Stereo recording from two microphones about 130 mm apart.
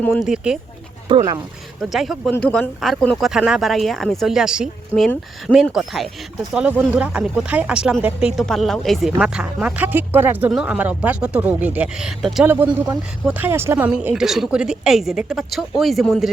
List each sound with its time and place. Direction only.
0.2 s a woman's voice: 5° right (ahead or behind)
1.1 s speech: 40° right (ahead or behind)
1.8 s a woman's voice: centre (ahead or behind)